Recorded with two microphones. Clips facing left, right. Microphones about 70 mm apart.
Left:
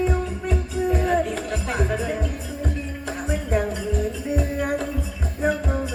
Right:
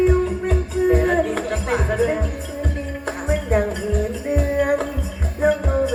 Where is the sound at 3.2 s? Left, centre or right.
Right.